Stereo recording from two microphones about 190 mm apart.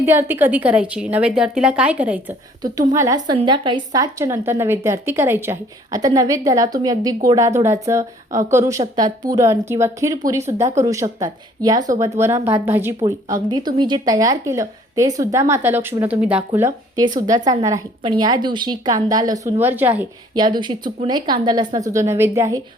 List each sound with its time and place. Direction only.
0.0 s a woman's voice: 10° right (ahead or behind)
2.6 s a woman's voice: 20° right (ahead or behind)
13.3 s a woman's voice: 20° right (ahead or behind)
20.3 s a woman's voice: 25° right (ahead or behind)